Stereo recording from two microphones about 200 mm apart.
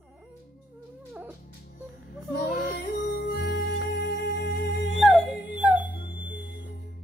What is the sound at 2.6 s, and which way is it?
Music, 50° left (ahead or behind).